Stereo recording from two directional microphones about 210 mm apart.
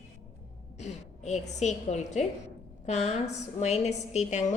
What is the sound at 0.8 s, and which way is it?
A woman's voice, 35° left (ahead or behind).